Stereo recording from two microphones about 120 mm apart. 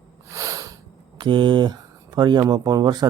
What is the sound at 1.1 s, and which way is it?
Speech, 40° right (ahead or behind).